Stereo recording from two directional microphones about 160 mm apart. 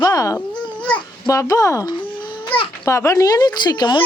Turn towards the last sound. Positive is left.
turn(degrees=25)  # may be behind; listen again after turning